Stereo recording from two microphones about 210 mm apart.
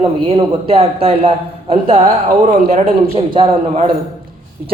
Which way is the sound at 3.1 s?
25° right (ahead or behind).